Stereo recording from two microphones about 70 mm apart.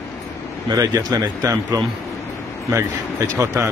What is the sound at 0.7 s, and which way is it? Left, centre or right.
Speech, right.